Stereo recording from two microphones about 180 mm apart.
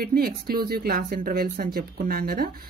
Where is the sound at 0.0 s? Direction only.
55° right (ahead or behind).